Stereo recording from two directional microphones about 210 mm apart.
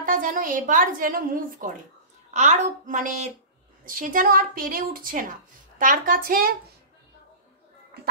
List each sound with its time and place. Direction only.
0.0 s a woman's voice: 40° right (ahead or behind)